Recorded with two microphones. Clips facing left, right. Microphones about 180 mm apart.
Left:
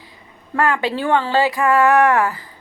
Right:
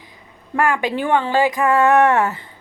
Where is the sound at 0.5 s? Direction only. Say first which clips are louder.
Even; 15° right (ahead or behind).